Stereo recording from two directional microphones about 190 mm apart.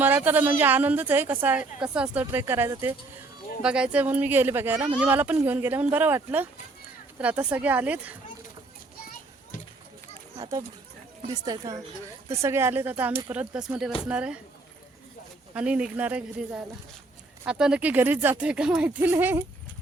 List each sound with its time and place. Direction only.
0.0 s a woman's voice: 10° right (ahead or behind)
10.3 s a woman's voice: 20° right (ahead or behind)
15.5 s a woman's voice: 5° right (ahead or behind)